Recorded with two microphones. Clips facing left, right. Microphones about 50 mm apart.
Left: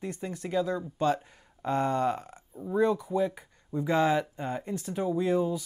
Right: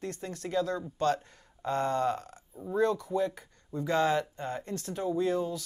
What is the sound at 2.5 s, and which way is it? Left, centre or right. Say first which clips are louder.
Speech: left 2 dB; centre.